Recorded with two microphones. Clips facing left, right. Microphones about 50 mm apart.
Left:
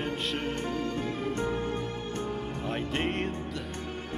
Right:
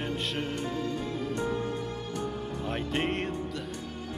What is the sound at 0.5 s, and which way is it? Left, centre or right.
Music, left.